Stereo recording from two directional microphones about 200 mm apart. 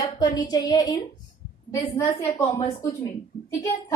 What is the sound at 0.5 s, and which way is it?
A woman's voice, 20° left (ahead or behind).